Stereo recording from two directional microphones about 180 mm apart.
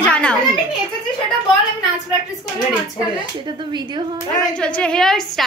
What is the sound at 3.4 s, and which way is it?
Speech, 25° right (ahead or behind).